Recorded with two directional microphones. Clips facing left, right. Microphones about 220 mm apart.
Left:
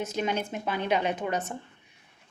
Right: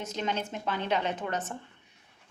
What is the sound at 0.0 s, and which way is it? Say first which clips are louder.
A woman's voice: left 3 dB; 10° left (ahead or behind).